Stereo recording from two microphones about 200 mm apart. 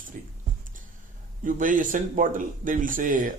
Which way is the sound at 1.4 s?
40° right (ahead or behind).